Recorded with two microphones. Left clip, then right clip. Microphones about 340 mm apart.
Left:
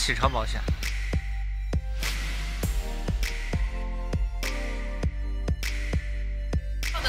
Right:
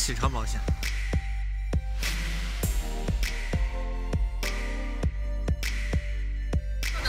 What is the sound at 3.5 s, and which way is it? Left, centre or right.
Music, centre.